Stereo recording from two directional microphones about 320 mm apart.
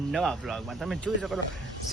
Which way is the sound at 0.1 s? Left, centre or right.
Centre.